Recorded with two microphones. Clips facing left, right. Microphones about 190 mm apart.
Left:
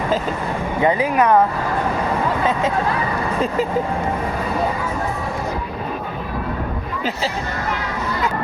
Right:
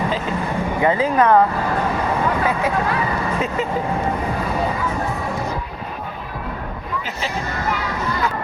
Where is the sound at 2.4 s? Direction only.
25° left (ahead or behind).